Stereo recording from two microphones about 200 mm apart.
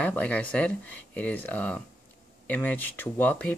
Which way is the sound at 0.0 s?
5° left (ahead or behind).